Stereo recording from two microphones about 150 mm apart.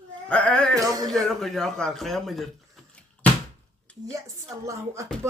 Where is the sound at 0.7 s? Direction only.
25° right (ahead or behind).